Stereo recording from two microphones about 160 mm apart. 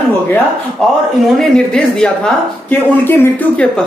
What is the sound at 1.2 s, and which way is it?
Speech, 5° left (ahead or behind).